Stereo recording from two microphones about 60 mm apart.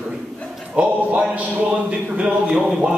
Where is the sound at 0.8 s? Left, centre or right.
Right.